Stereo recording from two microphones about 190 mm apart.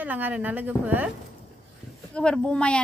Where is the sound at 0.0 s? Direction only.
10° right (ahead or behind).